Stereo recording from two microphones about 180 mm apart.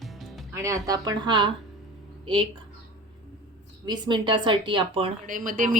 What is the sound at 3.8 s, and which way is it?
A woman's voice, 25° right (ahead or behind).